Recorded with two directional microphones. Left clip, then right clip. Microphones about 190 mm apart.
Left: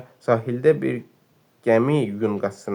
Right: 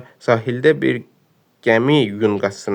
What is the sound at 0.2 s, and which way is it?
Speech, 50° right (ahead or behind).